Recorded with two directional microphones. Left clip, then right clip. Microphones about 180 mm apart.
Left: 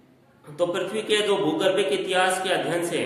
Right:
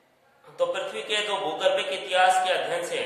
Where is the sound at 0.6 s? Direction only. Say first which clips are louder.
Left 2 dB; 20° left (ahead or behind).